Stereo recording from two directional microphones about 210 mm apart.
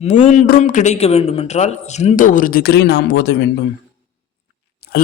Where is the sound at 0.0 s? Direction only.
30° left (ahead or behind); by 3.5 s 60° left (ahead or behind).